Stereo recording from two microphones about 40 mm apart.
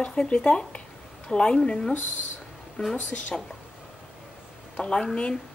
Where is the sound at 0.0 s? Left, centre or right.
Left.